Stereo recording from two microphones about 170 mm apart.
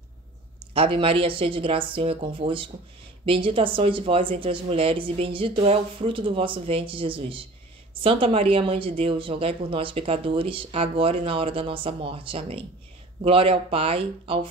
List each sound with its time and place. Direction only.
0.7 s speech: 30° right (ahead or behind)